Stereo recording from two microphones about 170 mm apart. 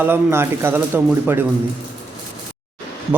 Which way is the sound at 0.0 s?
15° right (ahead or behind).